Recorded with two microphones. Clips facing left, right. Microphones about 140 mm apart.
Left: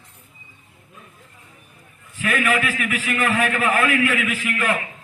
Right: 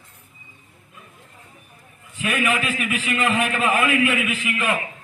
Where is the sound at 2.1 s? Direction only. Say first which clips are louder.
Left 1 dB; 20° right (ahead or behind).